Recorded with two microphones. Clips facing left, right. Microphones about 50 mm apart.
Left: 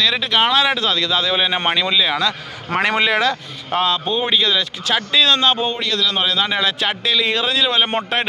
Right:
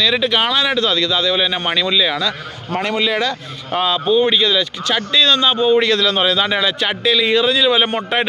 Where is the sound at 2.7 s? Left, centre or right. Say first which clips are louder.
Left 2 dB; left.